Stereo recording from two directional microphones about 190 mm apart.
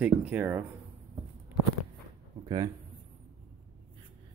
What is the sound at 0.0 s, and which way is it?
Speech, 10° right (ahead or behind).